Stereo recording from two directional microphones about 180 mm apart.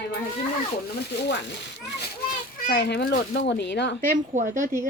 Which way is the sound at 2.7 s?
70° left (ahead or behind).